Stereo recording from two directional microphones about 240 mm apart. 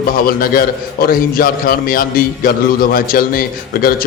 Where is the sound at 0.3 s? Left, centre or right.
Left.